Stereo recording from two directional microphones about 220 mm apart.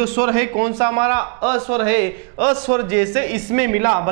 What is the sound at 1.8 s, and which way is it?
A man's voice, 15° right (ahead or behind).